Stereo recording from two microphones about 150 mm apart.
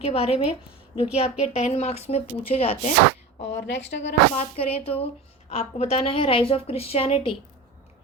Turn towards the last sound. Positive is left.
turn(degrees=35)  # may be behind; listen again after turning